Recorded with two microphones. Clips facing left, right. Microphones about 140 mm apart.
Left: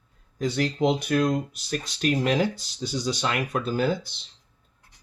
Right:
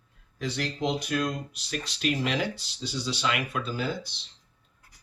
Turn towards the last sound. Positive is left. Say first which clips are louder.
# left 6 dB
turn(degrees=50)  # may be behind; listen again after turning